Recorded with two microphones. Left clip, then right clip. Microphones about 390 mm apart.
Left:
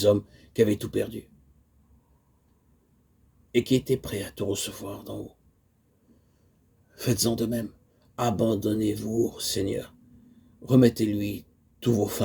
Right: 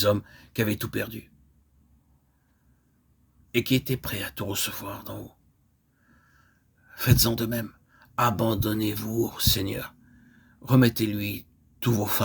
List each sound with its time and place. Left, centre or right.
0.0 s speech: right
3.5 s speech: right
6.9 s speech: right